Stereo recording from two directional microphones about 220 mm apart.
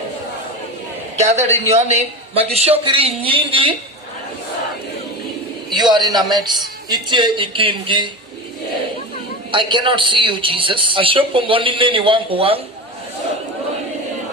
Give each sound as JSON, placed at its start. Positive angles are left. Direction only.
{"t": 1.2, "sound": "a man's voice", "side_deg": -30}
{"t": 5.7, "sound": "a man's voice", "side_deg": -20}
{"t": 9.5, "sound": "a man's voice", "side_deg": -20}